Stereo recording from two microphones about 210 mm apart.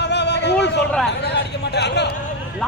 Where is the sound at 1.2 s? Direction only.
55° left (ahead or behind).